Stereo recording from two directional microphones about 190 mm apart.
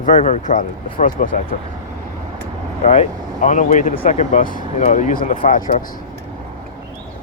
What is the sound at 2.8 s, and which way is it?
Speech, 35° left (ahead or behind).